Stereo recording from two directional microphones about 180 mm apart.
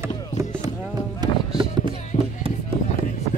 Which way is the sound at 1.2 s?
25° right (ahead or behind).